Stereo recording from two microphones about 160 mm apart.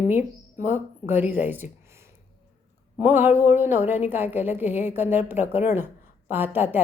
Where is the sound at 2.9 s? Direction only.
10° right (ahead or behind).